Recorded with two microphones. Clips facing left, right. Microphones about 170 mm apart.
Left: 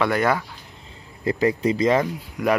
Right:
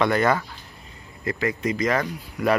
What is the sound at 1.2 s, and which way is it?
Speech, 30° left (ahead or behind).